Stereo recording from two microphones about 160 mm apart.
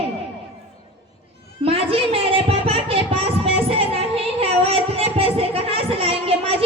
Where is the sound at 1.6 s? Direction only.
35° right (ahead or behind).